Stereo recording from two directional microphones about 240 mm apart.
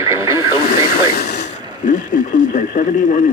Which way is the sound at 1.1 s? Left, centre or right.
Left.